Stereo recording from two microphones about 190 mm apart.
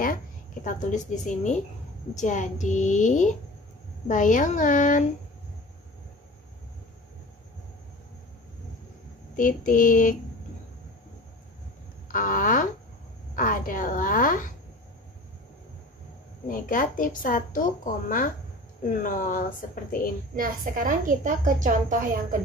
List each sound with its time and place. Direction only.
0.7 s a woman's voice: 40° left (ahead or behind)
9.4 s speech: 45° left (ahead or behind)
12.1 s speech: 45° left (ahead or behind)
16.4 s speech: 45° left (ahead or behind)
20.3 s a woman's voice: 45° right (ahead or behind)